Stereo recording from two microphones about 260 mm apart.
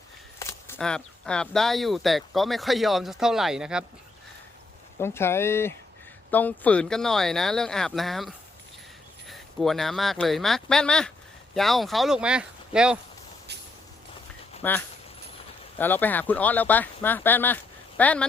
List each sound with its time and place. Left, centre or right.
0.3 s speech: centre
4.9 s speech: centre
13.5 s vehicle: right
14.6 s speech: centre